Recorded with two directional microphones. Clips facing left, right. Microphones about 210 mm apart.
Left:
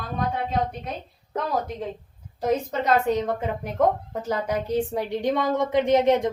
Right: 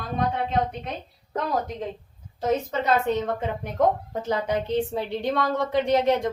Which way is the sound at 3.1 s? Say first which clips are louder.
Left 1 dB; 10° left (ahead or behind).